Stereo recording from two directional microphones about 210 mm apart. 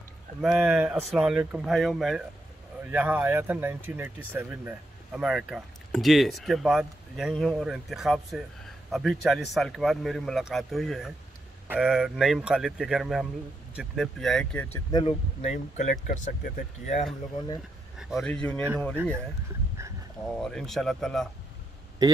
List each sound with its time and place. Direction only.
0.4 s speech: centre (ahead or behind); by 16.9 s 40° left (ahead or behind)
17.6 s a sound: 5° right (ahead or behind)
18.1 s speech: 5° left (ahead or behind)
19.8 s a sound: 15° right (ahead or behind)
20.3 s speech: centre (ahead or behind)
22.0 s a man's voice: 15° right (ahead or behind)